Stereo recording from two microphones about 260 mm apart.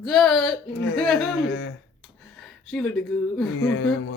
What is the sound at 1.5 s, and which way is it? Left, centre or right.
Speech, left.